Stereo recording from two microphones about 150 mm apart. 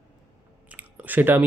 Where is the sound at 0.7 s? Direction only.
10° right (ahead or behind).